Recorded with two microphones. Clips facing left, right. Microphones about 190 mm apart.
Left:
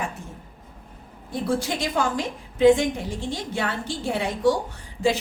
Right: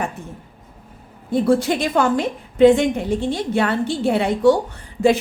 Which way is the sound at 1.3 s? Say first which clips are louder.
Right 8 dB; 65° right (ahead or behind).